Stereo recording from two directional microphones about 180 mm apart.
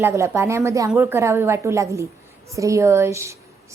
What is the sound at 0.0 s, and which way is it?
A woman's voice, 15° right (ahead or behind).